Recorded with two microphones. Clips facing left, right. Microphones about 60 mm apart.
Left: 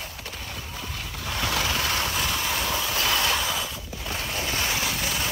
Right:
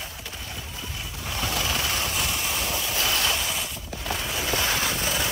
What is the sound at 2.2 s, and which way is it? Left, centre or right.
Vehicle, left.